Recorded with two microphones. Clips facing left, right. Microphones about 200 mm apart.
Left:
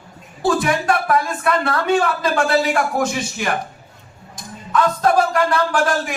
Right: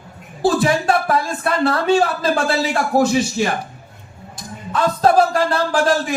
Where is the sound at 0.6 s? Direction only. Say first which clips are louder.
Right 2 dB; 30° right (ahead or behind).